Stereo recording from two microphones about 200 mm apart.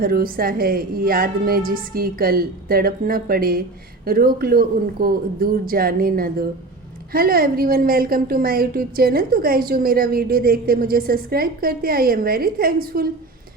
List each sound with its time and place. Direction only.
0.0 s a woman's voice: 50° right (ahead or behind)